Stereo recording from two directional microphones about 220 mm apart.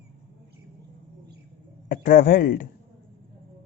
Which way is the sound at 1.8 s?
40° left (ahead or behind).